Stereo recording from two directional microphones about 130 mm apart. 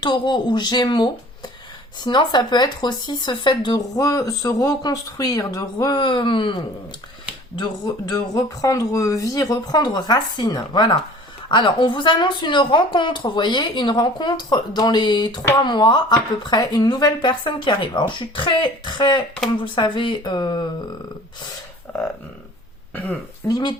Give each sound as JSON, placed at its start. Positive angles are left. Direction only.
{"t": 0.0, "sound": "speech", "side_deg": 35}
{"t": 8.1, "sound": "speech", "side_deg": 25}
{"t": 21.9, "sound": "a sound", "side_deg": 10}
{"t": 23.5, "sound": "speech", "side_deg": 30}